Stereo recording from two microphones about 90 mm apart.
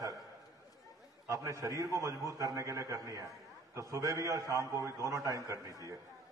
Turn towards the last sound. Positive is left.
turn(degrees=-35)  # may be behind; listen again after turning